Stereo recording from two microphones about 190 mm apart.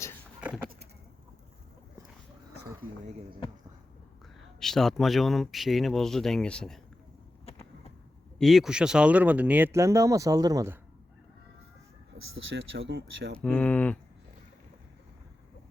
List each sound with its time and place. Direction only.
0.4 s a sound: 5° right (ahead or behind)
4.4 s speech: centre (ahead or behind)
7.5 s arrow: 30° left (ahead or behind)
8.4 s speech: centre (ahead or behind); by 10.8 s 15° right (ahead or behind)
12.1 s speech: 90° right
12.9 s speech: 70° right (ahead or behind)
13.4 s speech: 5° left (ahead or behind)